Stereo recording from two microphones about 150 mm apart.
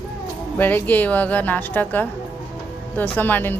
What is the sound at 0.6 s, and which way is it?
A woman's voice, 10° left (ahead or behind).